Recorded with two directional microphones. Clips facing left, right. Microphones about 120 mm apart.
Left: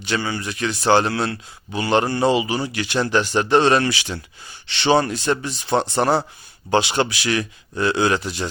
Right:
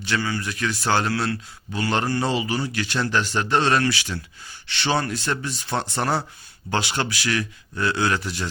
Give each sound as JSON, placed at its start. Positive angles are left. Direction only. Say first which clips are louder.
{"t": 0.0, "sound": "a man's voice", "louder": "left 1 dB", "side_deg": 20}